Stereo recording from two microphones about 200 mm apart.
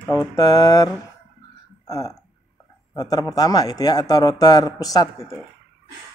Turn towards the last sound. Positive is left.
turn(degrees=15)  # may be behind; listen again after turning